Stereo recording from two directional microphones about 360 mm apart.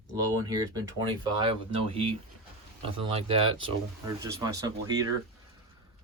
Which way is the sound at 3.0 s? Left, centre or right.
Centre.